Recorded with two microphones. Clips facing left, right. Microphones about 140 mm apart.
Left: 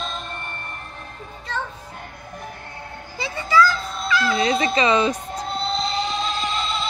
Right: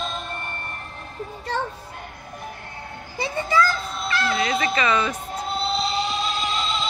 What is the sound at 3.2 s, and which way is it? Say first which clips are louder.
Music: left 2 dB; 50° right (ahead or behind).